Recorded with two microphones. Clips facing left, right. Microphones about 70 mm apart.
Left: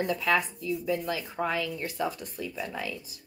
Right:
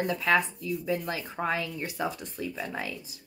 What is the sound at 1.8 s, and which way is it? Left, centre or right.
Speech, right.